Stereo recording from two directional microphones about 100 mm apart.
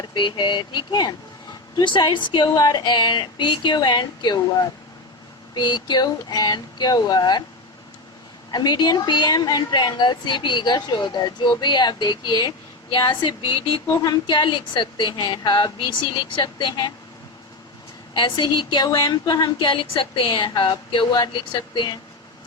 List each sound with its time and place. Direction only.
0.1 s a woman's voice: 55° left (ahead or behind)
5.5 s a woman's voice: 45° left (ahead or behind)
8.4 s a woman's voice: 45° left (ahead or behind)
13.8 s a woman's voice: 40° left (ahead or behind)
18.1 s a woman's voice: 50° left (ahead or behind)
19.6 s a woman's voice: 55° left (ahead or behind)